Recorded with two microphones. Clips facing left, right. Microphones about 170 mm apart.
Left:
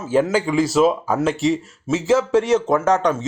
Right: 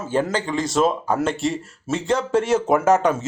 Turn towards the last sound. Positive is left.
turn(degrees=-5)  # may be behind; listen again after turning